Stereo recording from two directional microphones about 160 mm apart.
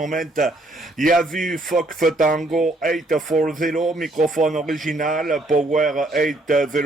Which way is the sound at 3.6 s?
55° right (ahead or behind).